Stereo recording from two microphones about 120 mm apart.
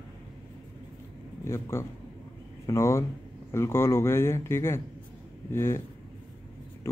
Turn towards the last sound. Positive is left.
turn(degrees=20)  # may be behind; listen again after turning